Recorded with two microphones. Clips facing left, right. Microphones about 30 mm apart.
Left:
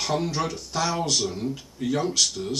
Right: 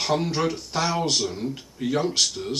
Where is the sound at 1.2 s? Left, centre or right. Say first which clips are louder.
Even; centre.